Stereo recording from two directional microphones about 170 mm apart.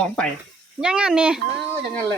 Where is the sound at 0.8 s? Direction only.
5° right (ahead or behind).